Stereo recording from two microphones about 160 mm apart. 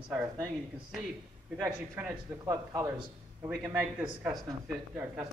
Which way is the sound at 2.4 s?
20° right (ahead or behind).